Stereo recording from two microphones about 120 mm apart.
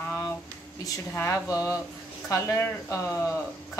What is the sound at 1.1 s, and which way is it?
Speech, 25° left (ahead or behind).